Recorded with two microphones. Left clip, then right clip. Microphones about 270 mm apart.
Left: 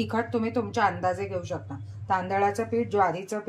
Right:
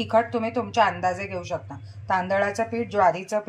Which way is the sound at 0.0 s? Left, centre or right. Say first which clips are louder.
Right 6 dB; centre.